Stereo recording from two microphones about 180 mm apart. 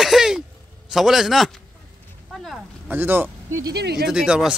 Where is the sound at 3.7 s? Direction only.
65° right (ahead or behind).